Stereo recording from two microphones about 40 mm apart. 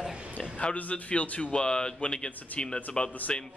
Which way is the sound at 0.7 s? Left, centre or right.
Left.